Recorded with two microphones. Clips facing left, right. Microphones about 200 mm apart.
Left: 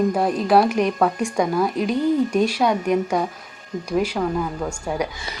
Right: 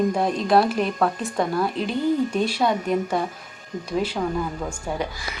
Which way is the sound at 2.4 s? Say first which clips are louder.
Left 2 dB; 10° left (ahead or behind).